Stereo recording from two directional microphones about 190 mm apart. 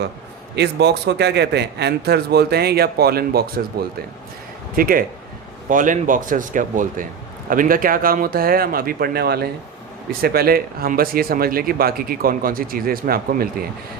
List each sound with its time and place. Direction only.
0.5 s a man's voice: 60° right (ahead or behind)
4.7 s speech: 50° right (ahead or behind)